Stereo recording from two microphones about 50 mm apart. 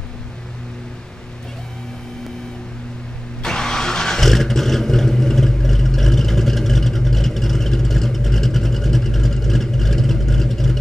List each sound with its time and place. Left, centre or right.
3.4 s vehicle: centre